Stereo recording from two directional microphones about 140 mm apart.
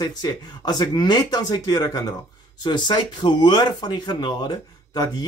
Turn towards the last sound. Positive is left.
turn(degrees=30)  # may be behind; listen again after turning